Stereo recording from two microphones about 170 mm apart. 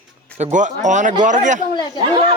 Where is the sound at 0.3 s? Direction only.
45° right (ahead or behind).